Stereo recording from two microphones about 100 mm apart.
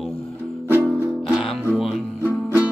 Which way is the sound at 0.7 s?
15° right (ahead or behind).